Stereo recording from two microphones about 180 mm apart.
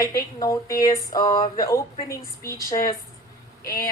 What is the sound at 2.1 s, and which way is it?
A woman's voice, 15° left (ahead or behind).